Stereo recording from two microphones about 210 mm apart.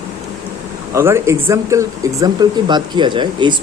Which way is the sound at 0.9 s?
10° right (ahead or behind).